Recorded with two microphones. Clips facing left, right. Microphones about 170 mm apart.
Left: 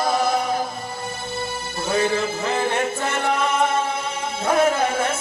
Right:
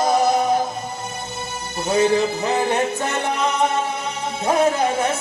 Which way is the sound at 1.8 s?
20° right (ahead or behind).